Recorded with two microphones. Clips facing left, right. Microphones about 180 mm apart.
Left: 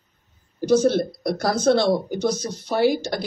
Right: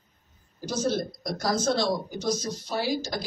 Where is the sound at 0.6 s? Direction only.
65° left (ahead or behind).